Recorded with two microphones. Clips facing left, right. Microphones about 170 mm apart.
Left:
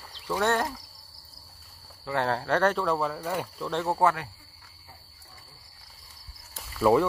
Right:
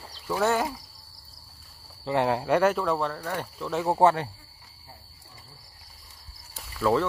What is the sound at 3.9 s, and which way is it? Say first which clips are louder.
Speech: right 5 dB; 30° right (ahead or behind).